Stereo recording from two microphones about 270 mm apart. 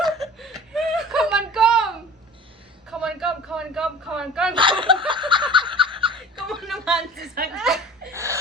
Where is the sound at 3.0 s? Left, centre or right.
Centre.